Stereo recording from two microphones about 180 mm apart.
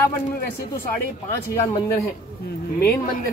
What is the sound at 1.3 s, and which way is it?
Speech, 15° left (ahead or behind).